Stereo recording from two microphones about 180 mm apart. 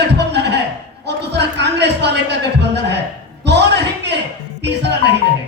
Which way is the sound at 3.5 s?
70° right (ahead or behind).